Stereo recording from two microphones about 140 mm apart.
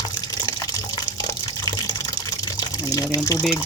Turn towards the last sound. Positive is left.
turn(degrees=25)  # may be behind; listen again after turning